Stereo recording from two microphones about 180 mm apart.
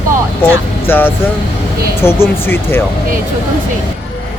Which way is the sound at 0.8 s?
10° left (ahead or behind).